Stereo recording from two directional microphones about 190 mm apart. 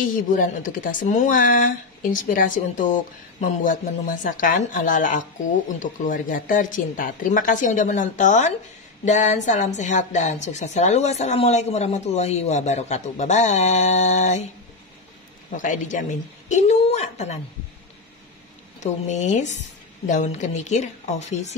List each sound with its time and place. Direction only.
0.0 s a woman's voice: 45° left (ahead or behind)
15.5 s a woman's voice: 40° left (ahead or behind)
18.8 s a woman's voice: 40° left (ahead or behind)